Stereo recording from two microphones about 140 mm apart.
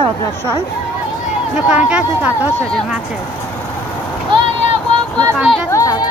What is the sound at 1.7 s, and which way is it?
Speech, 5° right (ahead or behind).